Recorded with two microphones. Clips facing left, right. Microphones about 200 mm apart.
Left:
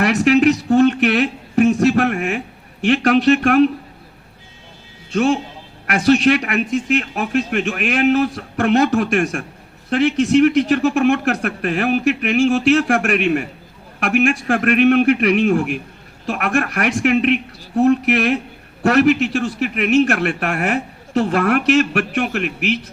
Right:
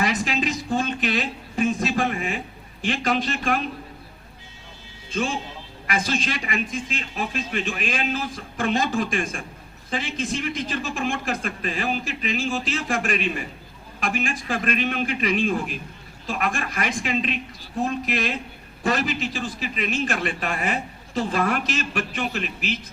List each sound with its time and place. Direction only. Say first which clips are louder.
0.0 s a sound: left 11 dB; 70° left (ahead or behind)
2.8 s a man's voice: left 10 dB; 70° left (ahead or behind)
5.1 s a man's voice: left 10 dB; 70° left (ahead or behind)